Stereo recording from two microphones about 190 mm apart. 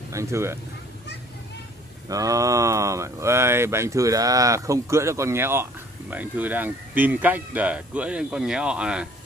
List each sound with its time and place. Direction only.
0.1 s speech: 15° right (ahead or behind)
2.0 s speech: 20° right (ahead or behind)